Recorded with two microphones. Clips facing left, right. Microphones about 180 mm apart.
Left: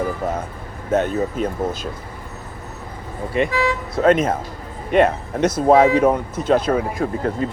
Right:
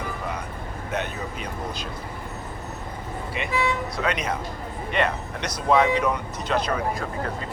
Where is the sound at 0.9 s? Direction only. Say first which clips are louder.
Left 11 dB; 45° left (ahead or behind).